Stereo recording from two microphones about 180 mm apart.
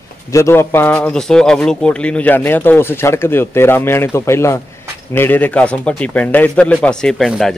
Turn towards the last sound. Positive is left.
turn(degrees=0)  # may be behind; listen again after turning